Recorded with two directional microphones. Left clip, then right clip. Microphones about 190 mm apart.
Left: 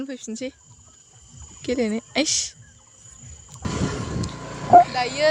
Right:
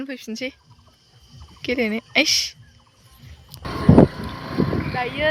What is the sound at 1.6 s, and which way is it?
Speech, 10° left (ahead or behind).